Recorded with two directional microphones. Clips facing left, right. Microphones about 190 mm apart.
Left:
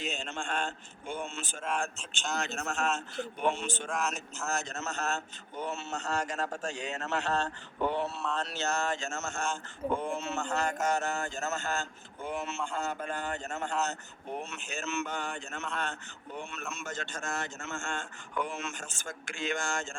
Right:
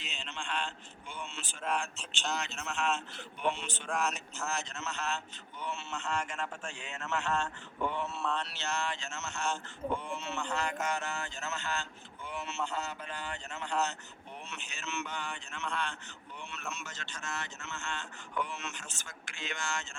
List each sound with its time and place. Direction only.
0.0 s a man's voice: 45° left (ahead or behind)
3.8 s a man's voice: centre (ahead or behind)
4.4 s speech: 45° left (ahead or behind)
8.4 s a man's voice: 45° left (ahead or behind)